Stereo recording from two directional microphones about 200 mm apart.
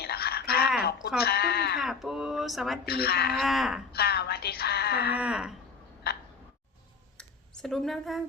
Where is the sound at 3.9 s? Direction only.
50° left (ahead or behind).